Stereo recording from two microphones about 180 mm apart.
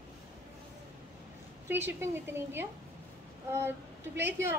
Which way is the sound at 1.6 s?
10° right (ahead or behind).